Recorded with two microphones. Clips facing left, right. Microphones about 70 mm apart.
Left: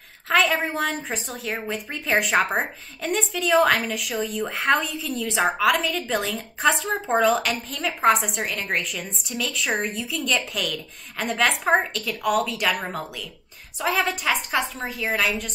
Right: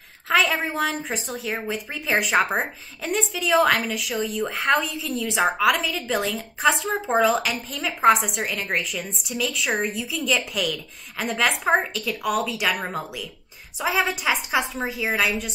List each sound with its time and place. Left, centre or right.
0.3 s a woman's voice: centre